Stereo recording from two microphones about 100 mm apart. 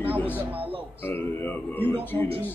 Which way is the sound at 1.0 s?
20° left (ahead or behind).